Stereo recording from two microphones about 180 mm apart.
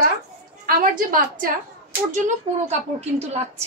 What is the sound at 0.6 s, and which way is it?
Speech, 50° right (ahead or behind).